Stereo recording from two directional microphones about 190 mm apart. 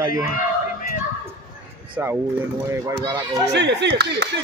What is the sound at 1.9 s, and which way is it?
Speech, 10° right (ahead or behind).